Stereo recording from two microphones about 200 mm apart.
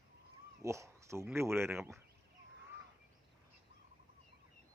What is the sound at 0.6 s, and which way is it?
Speech, 15° right (ahead or behind).